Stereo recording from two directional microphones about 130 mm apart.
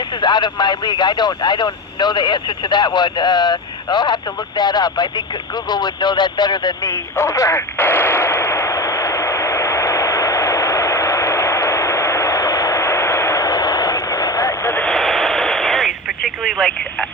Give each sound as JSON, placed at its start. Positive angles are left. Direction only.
{"t": 0.2, "sound": "speech", "side_deg": 35}
{"t": 5.6, "sound": "a sound", "side_deg": 35}
{"t": 14.8, "sound": "radio", "side_deg": 0}